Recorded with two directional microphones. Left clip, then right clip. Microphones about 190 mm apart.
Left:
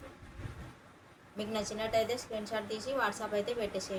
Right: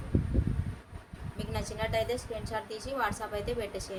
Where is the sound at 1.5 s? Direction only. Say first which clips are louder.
Even; 45° right (ahead or behind).